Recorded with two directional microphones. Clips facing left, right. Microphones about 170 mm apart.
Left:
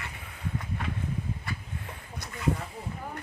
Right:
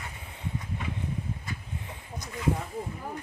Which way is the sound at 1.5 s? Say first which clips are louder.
Left 1 dB; 65° left (ahead or behind).